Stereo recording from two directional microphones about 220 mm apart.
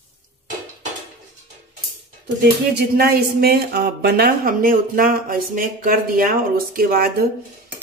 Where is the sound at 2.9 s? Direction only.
45° right (ahead or behind).